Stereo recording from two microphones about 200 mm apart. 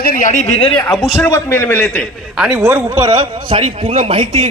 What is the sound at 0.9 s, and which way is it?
Speech, centre (ahead or behind).